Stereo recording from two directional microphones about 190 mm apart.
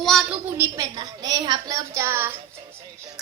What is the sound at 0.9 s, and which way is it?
Speech, 25° right (ahead or behind).